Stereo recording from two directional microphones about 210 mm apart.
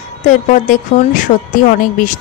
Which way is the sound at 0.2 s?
35° left (ahead or behind).